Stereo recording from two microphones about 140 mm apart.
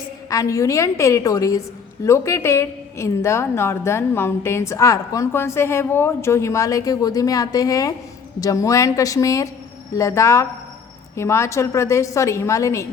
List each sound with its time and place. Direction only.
0.3 s a woman's voice: 25° left (ahead or behind)